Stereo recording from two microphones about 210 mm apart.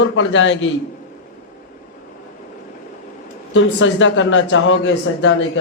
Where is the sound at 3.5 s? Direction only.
65° left (ahead or behind).